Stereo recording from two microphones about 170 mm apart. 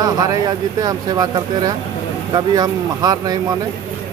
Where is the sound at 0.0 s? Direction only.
20° right (ahead or behind).